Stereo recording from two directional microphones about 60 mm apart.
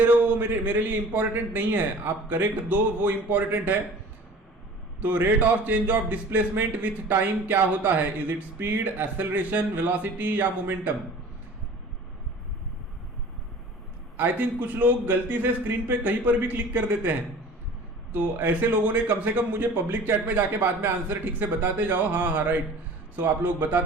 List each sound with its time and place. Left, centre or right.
0.0 s speech: right
4.9 s a man's voice: right
14.2 s a man's voice: right